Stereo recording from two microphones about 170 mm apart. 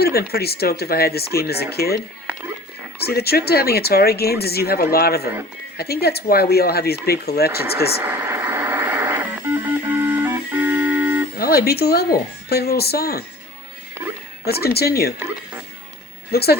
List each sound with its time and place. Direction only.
0.0 s speech: 65° left (ahead or behind)
3.0 s speech: 65° left (ahead or behind)
8.0 s vehicle: 15° right (ahead or behind)
9.9 s music: 15° right (ahead or behind)
11.3 s a woman's voice: 65° left (ahead or behind)
14.4 s speech: 70° left (ahead or behind)
16.3 s speech: 65° left (ahead or behind)